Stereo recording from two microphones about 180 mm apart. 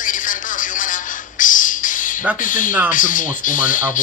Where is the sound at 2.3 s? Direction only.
45° left (ahead or behind).